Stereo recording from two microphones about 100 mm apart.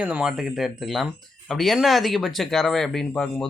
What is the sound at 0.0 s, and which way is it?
Speech, 15° right (ahead or behind).